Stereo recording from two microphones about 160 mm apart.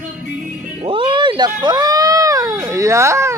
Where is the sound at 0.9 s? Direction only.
35° right (ahead or behind).